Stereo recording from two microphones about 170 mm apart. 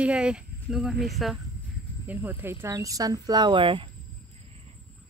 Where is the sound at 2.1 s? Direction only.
10° right (ahead or behind); by 3.9 s 30° right (ahead or behind).